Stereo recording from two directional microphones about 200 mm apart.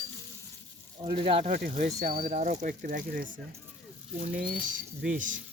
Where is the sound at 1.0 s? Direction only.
25° right (ahead or behind); by 3.2 s 45° right (ahead or behind).